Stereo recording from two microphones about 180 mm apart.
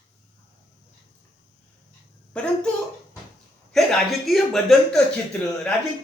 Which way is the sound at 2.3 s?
5° left (ahead or behind).